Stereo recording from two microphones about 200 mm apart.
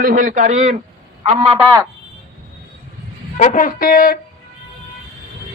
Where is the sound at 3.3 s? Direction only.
40° left (ahead or behind).